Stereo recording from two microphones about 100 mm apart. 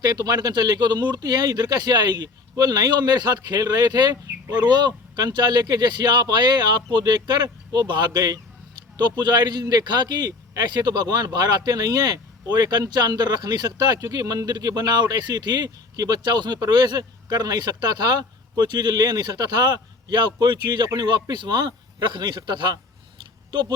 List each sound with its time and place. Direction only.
0.0 s a man's voice: 45° right (ahead or behind)